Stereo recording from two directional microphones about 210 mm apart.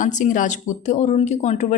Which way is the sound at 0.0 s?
40° left (ahead or behind).